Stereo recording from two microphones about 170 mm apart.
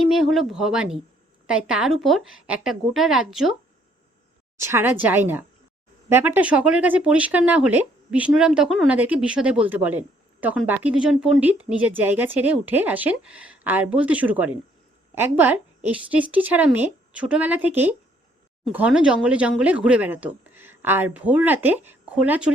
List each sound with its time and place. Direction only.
0.1 s a woman's voice: centre (ahead or behind)
4.5 s a woman's voice: 15° right (ahead or behind)